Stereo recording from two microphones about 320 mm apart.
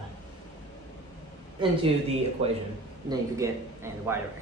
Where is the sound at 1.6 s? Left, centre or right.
Centre.